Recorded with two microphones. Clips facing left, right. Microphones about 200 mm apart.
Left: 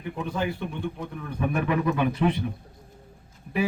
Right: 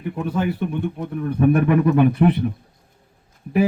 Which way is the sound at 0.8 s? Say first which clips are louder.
Right 7 dB; 60° right (ahead or behind).